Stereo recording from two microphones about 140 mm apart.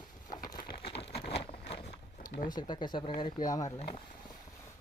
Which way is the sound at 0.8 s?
45° left (ahead or behind).